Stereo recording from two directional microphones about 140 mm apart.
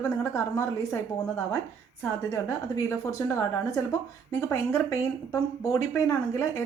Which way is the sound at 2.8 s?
25° left (ahead or behind).